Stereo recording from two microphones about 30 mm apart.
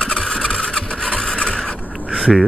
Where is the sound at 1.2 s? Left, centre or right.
Left.